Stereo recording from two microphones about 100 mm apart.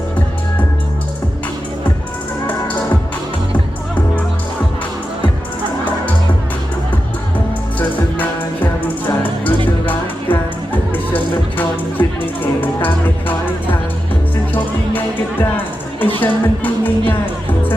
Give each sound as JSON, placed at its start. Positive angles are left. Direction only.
{"t": 8.8, "sound": "music", "side_deg": 15}